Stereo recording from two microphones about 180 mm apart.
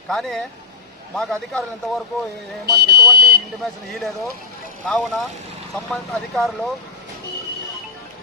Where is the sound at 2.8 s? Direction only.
65° right (ahead or behind).